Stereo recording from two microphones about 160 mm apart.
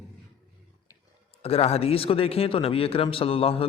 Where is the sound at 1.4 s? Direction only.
40° left (ahead or behind).